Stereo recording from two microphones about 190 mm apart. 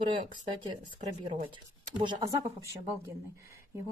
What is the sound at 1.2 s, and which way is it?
Speech, 30° right (ahead or behind).